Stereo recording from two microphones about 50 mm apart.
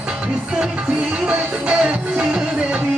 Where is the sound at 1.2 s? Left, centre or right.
Right.